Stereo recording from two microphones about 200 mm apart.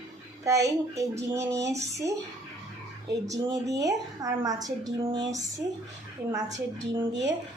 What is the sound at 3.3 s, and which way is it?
A woman's voice, 15° right (ahead or behind).